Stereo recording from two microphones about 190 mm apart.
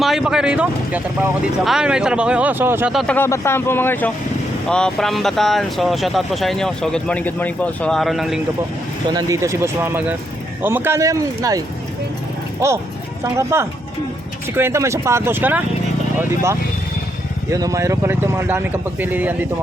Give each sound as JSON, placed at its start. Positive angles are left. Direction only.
{"t": 0.0, "sound": "speech", "side_deg": 0}
{"t": 2.9, "sound": "speech", "side_deg": 0}
{"t": 3.2, "sound": "speech", "side_deg": 15}
{"t": 9.0, "sound": "speech", "side_deg": -20}